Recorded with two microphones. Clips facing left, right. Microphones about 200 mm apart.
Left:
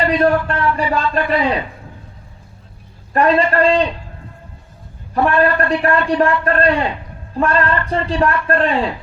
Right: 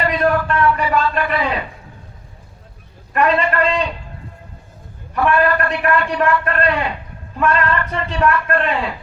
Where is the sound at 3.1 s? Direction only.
35° left (ahead or behind).